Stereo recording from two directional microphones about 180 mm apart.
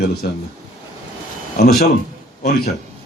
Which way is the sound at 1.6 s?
60° left (ahead or behind).